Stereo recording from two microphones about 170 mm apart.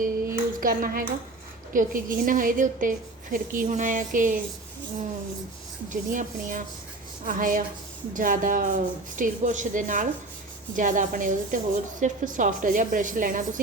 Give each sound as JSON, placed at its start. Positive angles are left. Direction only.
{"t": 0.0, "sound": "a sound", "side_deg": -55}
{"t": 1.7, "sound": "a woman's voice", "side_deg": -50}
{"t": 5.9, "sound": "a woman's voice", "side_deg": -50}